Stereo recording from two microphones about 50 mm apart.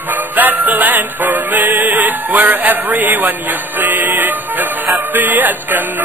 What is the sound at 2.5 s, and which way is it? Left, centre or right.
Speech, right.